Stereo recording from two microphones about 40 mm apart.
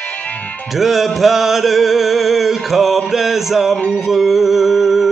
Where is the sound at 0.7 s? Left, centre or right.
Centre.